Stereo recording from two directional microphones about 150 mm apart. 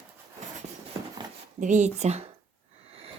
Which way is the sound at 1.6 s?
55° right (ahead or behind).